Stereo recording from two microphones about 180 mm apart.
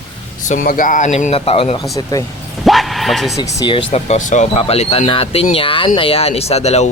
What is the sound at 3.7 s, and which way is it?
Speech, 30° left (ahead or behind).